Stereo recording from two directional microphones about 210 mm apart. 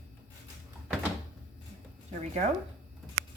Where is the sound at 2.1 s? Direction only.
35° right (ahead or behind).